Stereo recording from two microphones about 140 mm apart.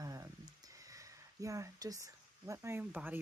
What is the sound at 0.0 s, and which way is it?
Speech, 25° right (ahead or behind).